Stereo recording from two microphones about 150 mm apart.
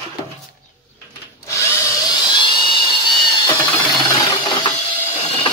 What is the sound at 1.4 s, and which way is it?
Drill, 20° left (ahead or behind).